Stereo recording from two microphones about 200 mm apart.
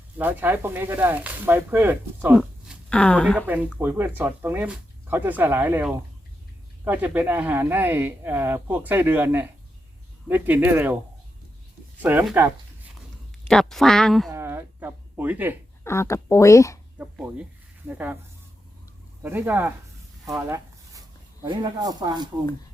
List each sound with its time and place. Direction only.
0.2 s speech: 10° right (ahead or behind)
2.4 s a sound: 5° left (ahead or behind)
3.3 s speech: 10° right (ahead or behind)
12.0 s speech: 10° right (ahead or behind)
13.5 s speech: centre (ahead or behind)
14.3 s a sound: 10° right (ahead or behind)
15.8 s speech: 15° left (ahead or behind)
17.0 s speech: 5° right (ahead or behind)
19.2 s speech: 10° right (ahead or behind)
20.3 s a sound: 15° right (ahead or behind)
21.4 s speech: 20° right (ahead or behind)